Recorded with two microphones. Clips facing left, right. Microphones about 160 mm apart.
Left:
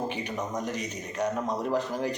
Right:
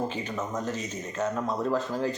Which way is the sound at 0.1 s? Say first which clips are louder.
Even; 15° left (ahead or behind).